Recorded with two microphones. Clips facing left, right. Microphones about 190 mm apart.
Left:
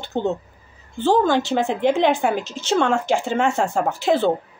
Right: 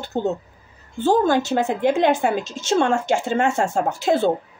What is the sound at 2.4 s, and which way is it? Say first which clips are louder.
Speech: even; 45° right (ahead or behind).